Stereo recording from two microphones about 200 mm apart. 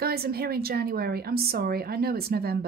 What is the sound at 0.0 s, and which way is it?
A woman's voice, 50° right (ahead or behind).